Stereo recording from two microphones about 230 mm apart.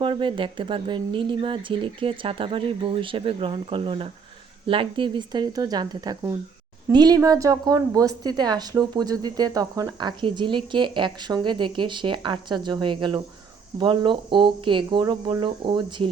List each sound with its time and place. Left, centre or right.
0.0 s a woman's voice: right